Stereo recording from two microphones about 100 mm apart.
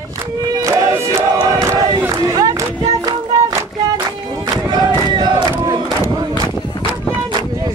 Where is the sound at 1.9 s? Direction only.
40° right (ahead or behind).